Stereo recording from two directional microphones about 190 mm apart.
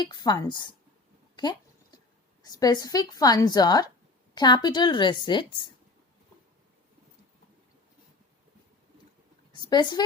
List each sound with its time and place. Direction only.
0.0 s a woman's voice: 20° left (ahead or behind)
1.4 s a sound: 20° left (ahead or behind)
2.4 s a woman's voice: 20° left (ahead or behind)
9.6 s a woman's voice: 20° left (ahead or behind)